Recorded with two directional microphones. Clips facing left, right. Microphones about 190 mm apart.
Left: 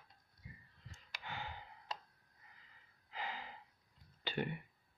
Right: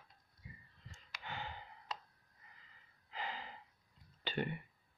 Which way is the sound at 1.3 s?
10° left (ahead or behind).